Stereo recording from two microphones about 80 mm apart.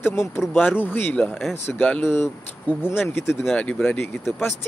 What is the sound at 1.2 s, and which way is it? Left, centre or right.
A man's voice, centre.